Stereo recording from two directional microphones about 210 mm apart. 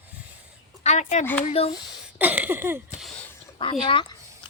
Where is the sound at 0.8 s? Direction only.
35° left (ahead or behind).